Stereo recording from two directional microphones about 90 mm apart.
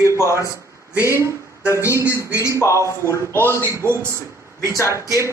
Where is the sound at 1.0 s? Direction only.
30° left (ahead or behind).